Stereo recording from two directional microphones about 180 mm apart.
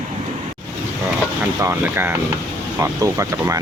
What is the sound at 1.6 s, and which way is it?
Speech, 10° right (ahead or behind).